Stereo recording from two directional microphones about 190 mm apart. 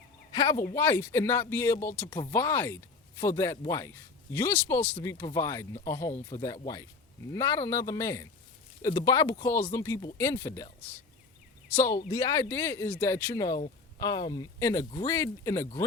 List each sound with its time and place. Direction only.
0.3 s speech: 20° left (ahead or behind)
2.0 s speech: 25° left (ahead or behind)
2.3 s speech: 10° left (ahead or behind)
11.7 s speech: 15° left (ahead or behind)